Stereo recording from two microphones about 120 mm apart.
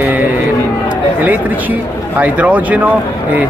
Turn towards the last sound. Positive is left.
turn(degrees=-10)  # may be behind; listen again after turning